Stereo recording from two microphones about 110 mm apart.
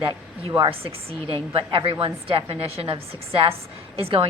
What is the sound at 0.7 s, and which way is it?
A woman's voice, 55° right (ahead or behind).